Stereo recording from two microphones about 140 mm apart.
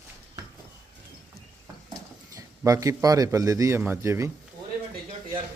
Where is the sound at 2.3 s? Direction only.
25° right (ahead or behind).